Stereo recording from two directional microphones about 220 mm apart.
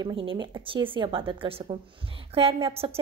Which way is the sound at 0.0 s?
25° right (ahead or behind).